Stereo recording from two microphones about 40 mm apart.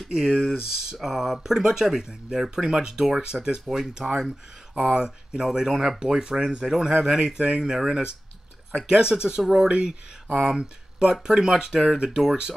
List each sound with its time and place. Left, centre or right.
0.1 s speech: centre